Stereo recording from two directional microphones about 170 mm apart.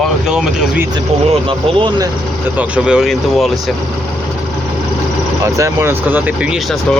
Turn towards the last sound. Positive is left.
turn(degrees=0)  # may be behind; listen again after turning